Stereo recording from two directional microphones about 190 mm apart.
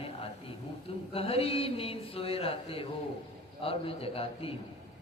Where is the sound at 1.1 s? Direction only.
30° left (ahead or behind).